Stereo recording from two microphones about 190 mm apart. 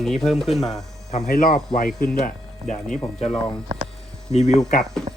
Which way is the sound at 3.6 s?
30° right (ahead or behind).